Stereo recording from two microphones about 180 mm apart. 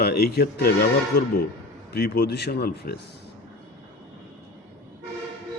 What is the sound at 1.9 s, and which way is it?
A man's voice, 65° left (ahead or behind).